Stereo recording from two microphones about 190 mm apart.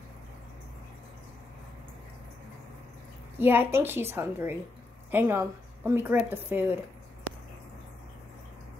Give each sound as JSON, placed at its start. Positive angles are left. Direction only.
{"t": 3.3, "sound": "a woman's voice", "side_deg": -10}